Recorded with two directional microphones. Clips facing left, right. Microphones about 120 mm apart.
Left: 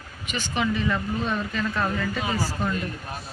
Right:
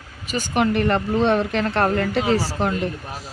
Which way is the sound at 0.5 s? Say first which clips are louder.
Right 6 dB; 60° right (ahead or behind).